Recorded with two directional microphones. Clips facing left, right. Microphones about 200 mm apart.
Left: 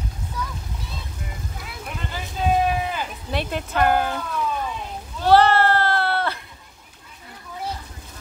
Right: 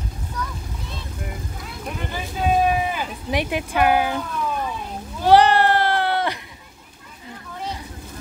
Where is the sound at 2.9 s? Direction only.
15° right (ahead or behind).